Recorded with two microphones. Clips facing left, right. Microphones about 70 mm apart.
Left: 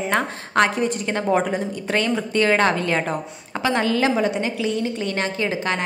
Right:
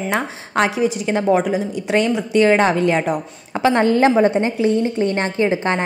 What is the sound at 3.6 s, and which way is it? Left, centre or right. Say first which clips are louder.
A woman's voice: right 6 dB; right.